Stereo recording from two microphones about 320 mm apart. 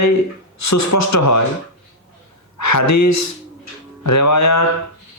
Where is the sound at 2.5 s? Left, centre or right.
Left.